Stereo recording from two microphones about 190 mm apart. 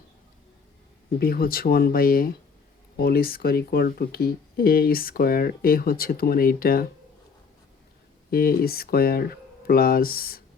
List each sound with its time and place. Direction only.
1.2 s speech: 50° left (ahead or behind)
8.3 s speech: 50° left (ahead or behind)